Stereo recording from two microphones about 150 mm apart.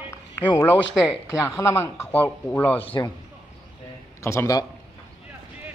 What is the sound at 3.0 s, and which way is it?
Speech, 25° left (ahead or behind).